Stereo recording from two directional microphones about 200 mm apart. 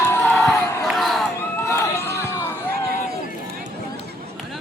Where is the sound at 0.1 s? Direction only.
10° left (ahead or behind).